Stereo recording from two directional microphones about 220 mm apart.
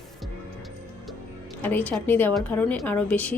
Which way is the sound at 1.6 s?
10° left (ahead or behind).